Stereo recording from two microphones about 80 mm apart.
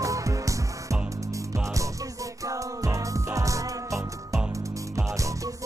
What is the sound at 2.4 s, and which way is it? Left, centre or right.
Music, right.